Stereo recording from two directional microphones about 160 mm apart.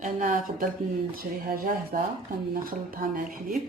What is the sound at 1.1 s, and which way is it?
Speech, 65° right (ahead or behind).